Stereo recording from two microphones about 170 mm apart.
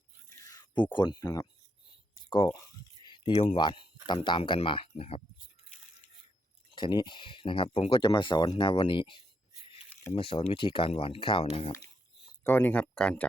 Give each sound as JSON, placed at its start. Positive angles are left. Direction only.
{"t": 0.3, "sound": "a sound", "side_deg": 20}
{"t": 1.2, "sound": "speech", "side_deg": 20}
{"t": 2.1, "sound": "a sound", "side_deg": 20}
{"t": 3.4, "sound": "speech", "side_deg": 30}
{"t": 6.7, "sound": "speech", "side_deg": 25}
{"t": 12.5, "sound": "speech", "side_deg": 10}